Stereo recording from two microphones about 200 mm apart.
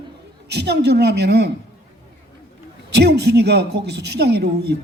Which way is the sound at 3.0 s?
55° right (ahead or behind).